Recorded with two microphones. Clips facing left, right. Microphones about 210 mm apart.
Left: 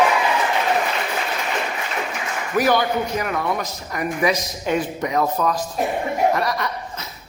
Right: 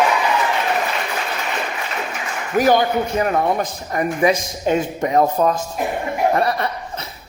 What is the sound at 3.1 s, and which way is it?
Speech, 30° right (ahead or behind).